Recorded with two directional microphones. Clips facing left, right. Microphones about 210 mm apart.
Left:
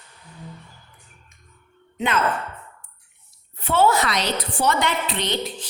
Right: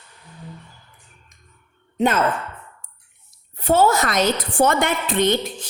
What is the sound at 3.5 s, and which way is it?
A woman's voice, 40° right (ahead or behind).